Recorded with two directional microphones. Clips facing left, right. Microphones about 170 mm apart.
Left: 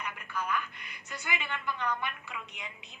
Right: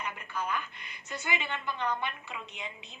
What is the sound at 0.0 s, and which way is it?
A woman's voice, 25° right (ahead or behind).